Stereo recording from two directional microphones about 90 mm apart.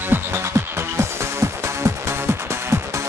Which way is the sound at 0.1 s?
30° right (ahead or behind).